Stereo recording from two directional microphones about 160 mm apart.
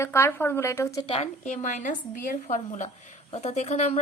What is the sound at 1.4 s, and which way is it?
A woman's voice, 50° left (ahead or behind).